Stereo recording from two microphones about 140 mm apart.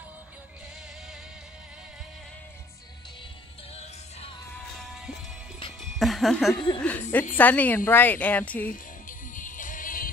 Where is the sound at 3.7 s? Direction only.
45° left (ahead or behind).